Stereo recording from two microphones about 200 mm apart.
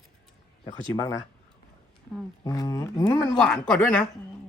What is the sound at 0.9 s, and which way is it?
Speech, 15° left (ahead or behind).